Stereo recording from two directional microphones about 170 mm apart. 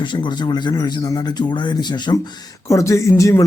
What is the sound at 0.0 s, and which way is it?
Speech, 30° left (ahead or behind).